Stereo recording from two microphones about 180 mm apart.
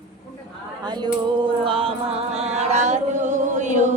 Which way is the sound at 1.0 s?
30° right (ahead or behind).